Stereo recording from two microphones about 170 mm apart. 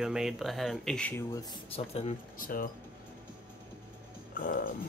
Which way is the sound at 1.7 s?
40° left (ahead or behind).